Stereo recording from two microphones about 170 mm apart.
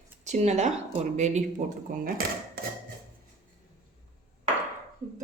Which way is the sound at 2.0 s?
55° right (ahead or behind).